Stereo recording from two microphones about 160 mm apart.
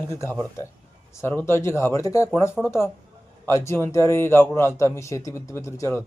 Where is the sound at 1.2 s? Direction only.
15° left (ahead or behind).